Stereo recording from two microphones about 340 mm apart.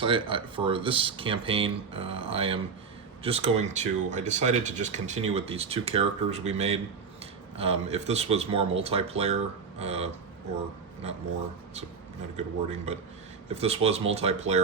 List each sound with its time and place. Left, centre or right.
0.0 s speech: centre
12.4 s speech: centre